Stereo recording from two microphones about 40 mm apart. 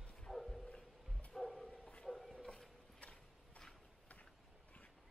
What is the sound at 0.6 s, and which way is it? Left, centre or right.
Music, left.